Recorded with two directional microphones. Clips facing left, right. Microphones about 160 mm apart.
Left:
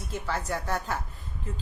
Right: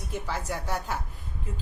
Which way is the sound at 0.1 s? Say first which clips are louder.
Left 1 dB; 10° right (ahead or behind).